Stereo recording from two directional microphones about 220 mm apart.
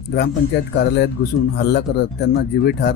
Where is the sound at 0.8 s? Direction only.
50° left (ahead or behind).